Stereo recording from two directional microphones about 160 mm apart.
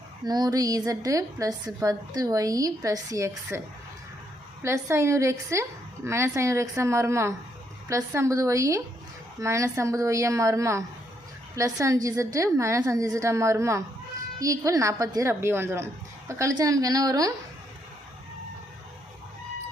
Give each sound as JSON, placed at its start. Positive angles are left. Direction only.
{"t": 0.3, "sound": "a woman's voice", "side_deg": -25}
{"t": 4.6, "sound": "a woman's voice", "side_deg": -15}